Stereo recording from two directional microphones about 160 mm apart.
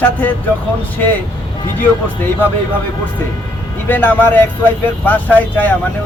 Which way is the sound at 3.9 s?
10° left (ahead or behind).